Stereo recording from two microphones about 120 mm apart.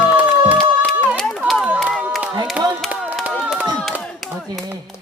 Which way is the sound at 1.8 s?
Centre (ahead or behind).